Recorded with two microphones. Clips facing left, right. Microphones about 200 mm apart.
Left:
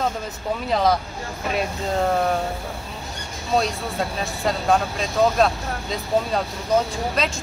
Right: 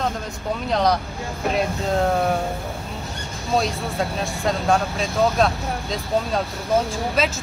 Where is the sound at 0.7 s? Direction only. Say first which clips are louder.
Even; centre (ahead or behind).